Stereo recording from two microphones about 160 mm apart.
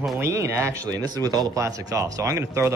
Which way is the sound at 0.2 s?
15° right (ahead or behind).